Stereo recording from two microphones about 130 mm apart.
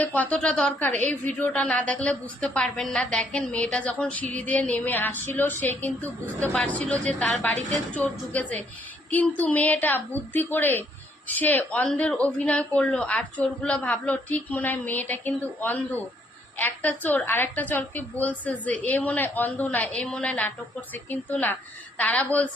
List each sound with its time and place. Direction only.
0.0 s a woman's voice: 10° left (ahead or behind)